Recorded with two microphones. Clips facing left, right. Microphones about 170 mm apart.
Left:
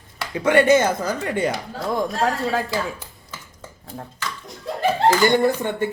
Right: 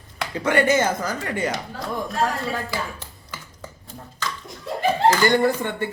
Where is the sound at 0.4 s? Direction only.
20° left (ahead or behind).